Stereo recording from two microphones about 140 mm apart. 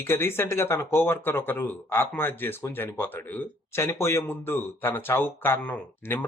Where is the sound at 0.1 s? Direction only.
15° left (ahead or behind).